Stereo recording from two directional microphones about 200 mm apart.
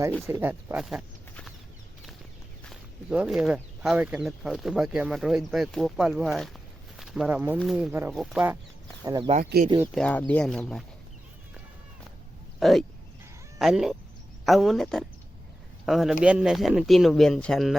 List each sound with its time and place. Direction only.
0.3 s speech: 10° right (ahead or behind)
2.6 s speech: 5° right (ahead or behind)
9.0 s speech: 20° right (ahead or behind)
9.4 s speech: 50° right (ahead or behind)
9.9 s speech: 5° left (ahead or behind)
12.5 s speech: centre (ahead or behind)